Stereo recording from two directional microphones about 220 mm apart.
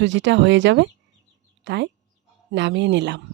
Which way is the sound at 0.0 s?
55° right (ahead or behind).